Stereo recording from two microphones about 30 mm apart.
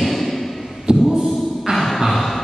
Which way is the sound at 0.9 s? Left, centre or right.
Right.